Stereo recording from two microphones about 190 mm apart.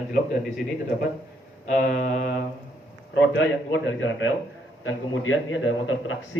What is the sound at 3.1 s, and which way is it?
A man's voice, 75° left (ahead or behind).